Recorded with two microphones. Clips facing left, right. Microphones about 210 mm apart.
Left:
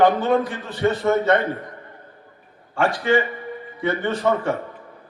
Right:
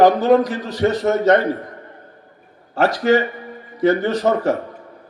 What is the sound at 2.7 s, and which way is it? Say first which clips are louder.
A man's voice: right 4 dB; 40° right (ahead or behind).